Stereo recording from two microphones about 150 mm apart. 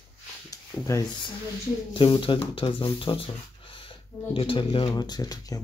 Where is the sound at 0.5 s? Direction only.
25° left (ahead or behind).